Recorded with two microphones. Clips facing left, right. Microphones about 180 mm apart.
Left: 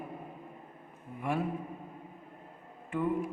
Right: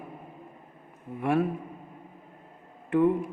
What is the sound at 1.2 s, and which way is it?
Speech, 65° right (ahead or behind).